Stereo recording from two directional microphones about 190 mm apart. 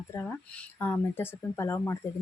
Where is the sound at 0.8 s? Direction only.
10° left (ahead or behind).